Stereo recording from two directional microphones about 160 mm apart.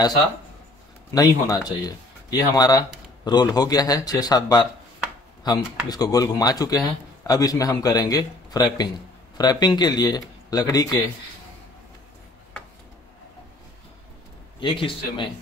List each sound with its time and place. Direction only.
1.1 s a man's voice: 25° left (ahead or behind)
14.6 s a man's voice: 35° left (ahead or behind)